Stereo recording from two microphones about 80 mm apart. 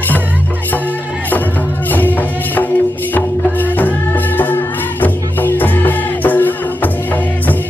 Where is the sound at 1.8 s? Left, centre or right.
Left.